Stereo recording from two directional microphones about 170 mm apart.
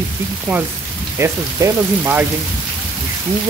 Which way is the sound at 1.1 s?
15° right (ahead or behind).